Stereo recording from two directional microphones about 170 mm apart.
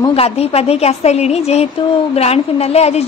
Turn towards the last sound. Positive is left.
turn(degrees=40)  # may be behind; listen again after turning